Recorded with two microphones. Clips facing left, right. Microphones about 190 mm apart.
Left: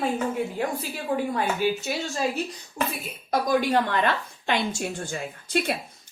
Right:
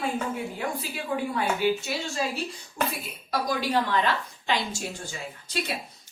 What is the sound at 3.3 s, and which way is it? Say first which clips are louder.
A woman's voice: left 4 dB; 50° left (ahead or behind).